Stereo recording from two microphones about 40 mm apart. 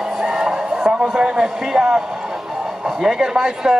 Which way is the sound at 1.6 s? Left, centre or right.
Centre.